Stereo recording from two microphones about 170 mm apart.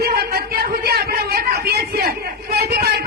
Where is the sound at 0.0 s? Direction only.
60° right (ahead or behind).